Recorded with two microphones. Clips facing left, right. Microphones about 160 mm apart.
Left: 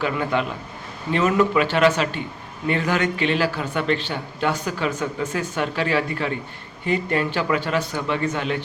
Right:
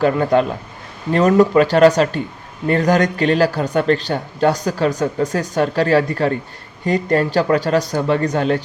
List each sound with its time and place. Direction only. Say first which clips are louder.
0.0 s speech: right 8 dB; 40° right (ahead or behind)